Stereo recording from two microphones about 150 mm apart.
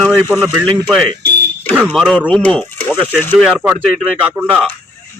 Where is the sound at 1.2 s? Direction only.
90° right.